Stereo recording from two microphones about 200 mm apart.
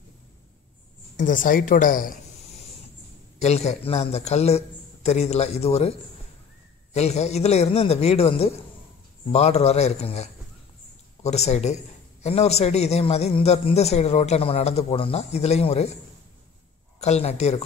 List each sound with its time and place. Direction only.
1.1 s a woman's voice: 40° left (ahead or behind)
17.0 s a man's voice: 35° left (ahead or behind)